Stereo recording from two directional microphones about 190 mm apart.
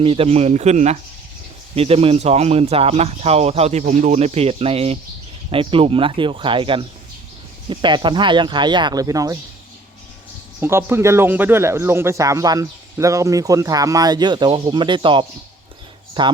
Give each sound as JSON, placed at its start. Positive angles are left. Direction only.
{"t": 0.0, "sound": "speech", "side_deg": -30}
{"t": 10.6, "sound": "speech", "side_deg": -10}